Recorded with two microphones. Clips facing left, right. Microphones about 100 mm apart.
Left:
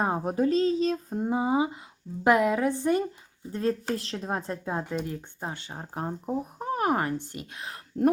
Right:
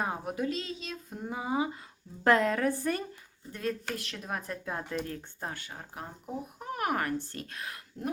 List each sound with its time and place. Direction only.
0.0 s a woman's voice: 35° left (ahead or behind); by 3.0 s 20° left (ahead or behind)
3.5 s speech: 30° left (ahead or behind)
6.7 s speech: 30° left (ahead or behind)